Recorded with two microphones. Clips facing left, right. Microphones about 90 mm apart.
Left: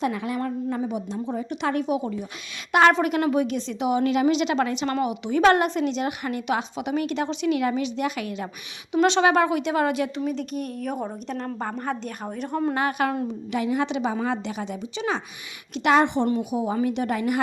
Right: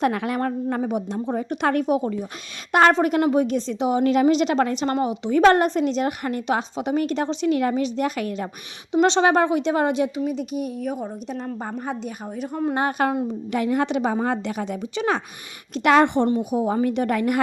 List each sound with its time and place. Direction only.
0.0 s a woman's voice: 65° right (ahead or behind); by 8.4 s 40° right (ahead or behind)
8.9 s speech: 30° right (ahead or behind)
10.2 s a woman's voice: 10° right (ahead or behind)
12.7 s a woman's voice: 35° right (ahead or behind)
13.5 s a woman's voice: 50° right (ahead or behind)